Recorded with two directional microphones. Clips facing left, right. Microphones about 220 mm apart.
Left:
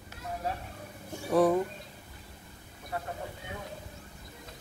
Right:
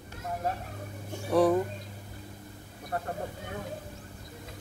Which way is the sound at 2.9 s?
50° right (ahead or behind).